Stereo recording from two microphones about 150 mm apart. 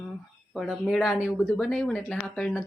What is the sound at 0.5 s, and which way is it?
Speech, centre (ahead or behind).